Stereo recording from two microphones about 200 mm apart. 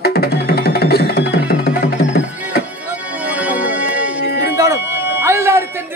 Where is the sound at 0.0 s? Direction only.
50° left (ahead or behind).